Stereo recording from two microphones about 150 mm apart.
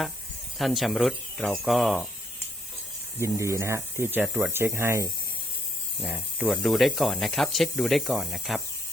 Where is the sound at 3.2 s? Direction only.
20° right (ahead or behind); by 8.6 s centre (ahead or behind).